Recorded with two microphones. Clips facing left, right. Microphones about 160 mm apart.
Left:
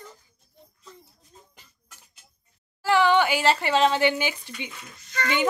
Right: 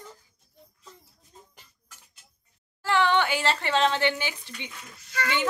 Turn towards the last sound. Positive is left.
turn(degrees=-5)  # may be behind; listen again after turning